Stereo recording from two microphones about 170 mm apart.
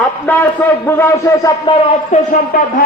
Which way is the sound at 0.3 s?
10° left (ahead or behind).